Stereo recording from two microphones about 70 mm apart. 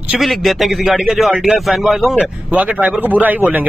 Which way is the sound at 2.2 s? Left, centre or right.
Centre.